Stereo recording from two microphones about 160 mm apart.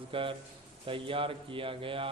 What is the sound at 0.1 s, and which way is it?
A man's voice, 35° right (ahead or behind).